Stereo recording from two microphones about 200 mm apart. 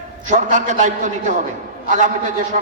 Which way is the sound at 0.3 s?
40° right (ahead or behind).